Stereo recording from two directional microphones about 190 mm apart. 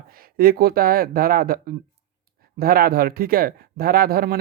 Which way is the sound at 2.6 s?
50° right (ahead or behind).